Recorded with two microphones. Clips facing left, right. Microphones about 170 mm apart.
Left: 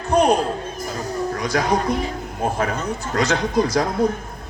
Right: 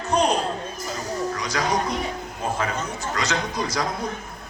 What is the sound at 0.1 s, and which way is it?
Music, 55° left (ahead or behind).